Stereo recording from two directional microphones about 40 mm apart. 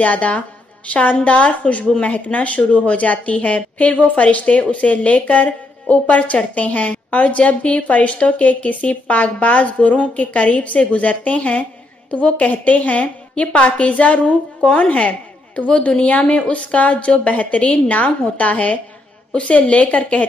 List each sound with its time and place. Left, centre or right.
0.0 s a woman's voice: left
12.4 s a woman's voice: left